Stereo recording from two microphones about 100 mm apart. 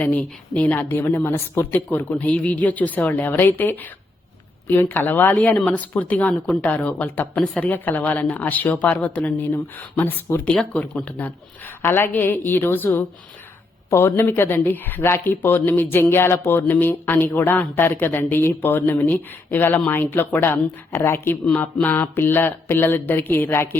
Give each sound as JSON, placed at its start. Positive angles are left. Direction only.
{"t": 0.0, "sound": "a woman's voice", "side_deg": 15}
{"t": 10.5, "sound": "speech", "side_deg": 5}
{"t": 13.9, "sound": "speech", "side_deg": 25}